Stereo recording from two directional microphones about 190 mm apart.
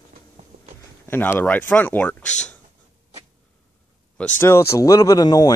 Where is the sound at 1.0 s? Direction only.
10° left (ahead or behind).